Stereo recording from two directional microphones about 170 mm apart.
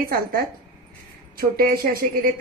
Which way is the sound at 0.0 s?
60° right (ahead or behind).